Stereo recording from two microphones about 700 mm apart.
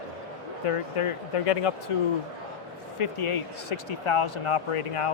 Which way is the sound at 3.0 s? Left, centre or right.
Left.